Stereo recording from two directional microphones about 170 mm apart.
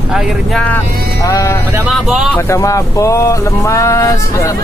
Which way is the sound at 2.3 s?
15° left (ahead or behind).